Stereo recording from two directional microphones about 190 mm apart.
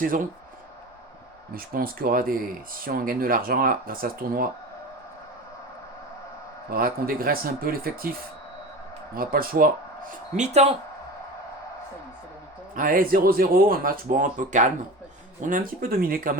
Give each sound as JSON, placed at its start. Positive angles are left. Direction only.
{"t": 1.5, "sound": "speech", "side_deg": -50}
{"t": 6.7, "sound": "speech", "side_deg": -50}
{"t": 12.7, "sound": "speech", "side_deg": -45}